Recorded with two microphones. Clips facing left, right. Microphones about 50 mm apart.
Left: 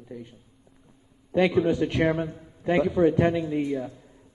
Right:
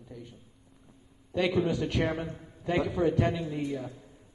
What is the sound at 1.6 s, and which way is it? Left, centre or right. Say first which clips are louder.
A man's voice: left 5 dB; left.